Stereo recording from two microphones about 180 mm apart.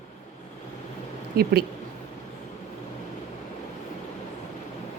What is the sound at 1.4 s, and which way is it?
Speech, 60° right (ahead or behind).